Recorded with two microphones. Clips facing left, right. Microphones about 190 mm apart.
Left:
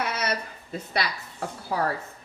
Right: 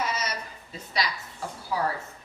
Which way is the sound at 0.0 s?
60° left (ahead or behind).